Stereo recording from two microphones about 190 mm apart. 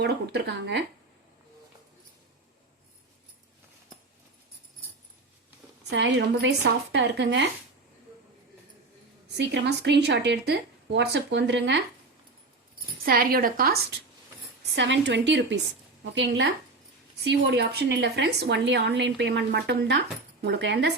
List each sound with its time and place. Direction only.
0.0 s a woman's voice: 60° right (ahead or behind)
5.9 s a woman's voice: 70° right (ahead or behind)
9.4 s a woman's voice: 65° right (ahead or behind)
13.1 s a woman's voice: 50° right (ahead or behind)
14.8 s a woman's voice: 70° right (ahead or behind)